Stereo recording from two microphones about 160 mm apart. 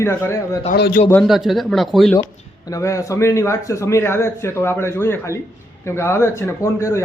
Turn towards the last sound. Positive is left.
turn(degrees=20)  # may be behind; listen again after turning